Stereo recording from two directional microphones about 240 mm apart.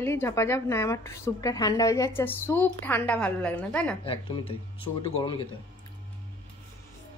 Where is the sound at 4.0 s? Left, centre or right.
Left.